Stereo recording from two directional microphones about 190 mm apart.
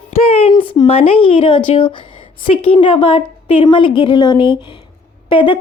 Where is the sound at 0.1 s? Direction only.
30° left (ahead or behind).